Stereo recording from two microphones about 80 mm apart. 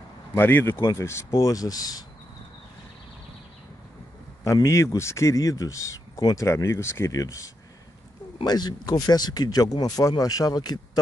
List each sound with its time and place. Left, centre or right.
0.3 s speech: left
4.6 s speech: left
7.1 s speech: left
8.5 s speech: left